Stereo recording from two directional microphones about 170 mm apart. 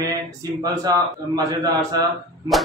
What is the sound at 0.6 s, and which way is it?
A man's voice, 20° right (ahead or behind).